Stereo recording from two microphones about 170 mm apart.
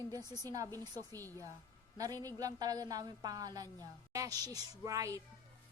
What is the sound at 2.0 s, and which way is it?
A woman's voice, 20° right (ahead or behind).